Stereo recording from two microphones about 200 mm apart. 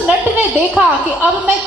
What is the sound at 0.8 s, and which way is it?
Speech, 10° right (ahead or behind).